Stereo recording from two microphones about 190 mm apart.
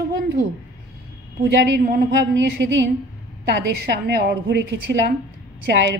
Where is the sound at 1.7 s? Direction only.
60° right (ahead or behind).